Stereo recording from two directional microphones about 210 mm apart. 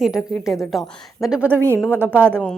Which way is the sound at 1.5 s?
10° right (ahead or behind).